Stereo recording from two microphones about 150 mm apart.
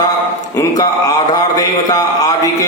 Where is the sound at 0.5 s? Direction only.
25° left (ahead or behind).